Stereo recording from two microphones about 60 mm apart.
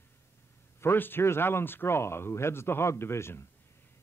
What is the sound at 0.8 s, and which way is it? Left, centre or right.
Speech, left.